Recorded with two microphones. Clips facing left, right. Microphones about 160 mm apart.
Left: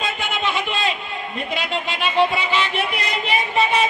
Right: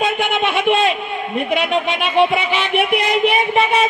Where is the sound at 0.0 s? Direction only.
60° right (ahead or behind).